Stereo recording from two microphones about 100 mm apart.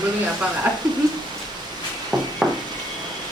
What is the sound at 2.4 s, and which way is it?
Sizzle, 5° right (ahead or behind).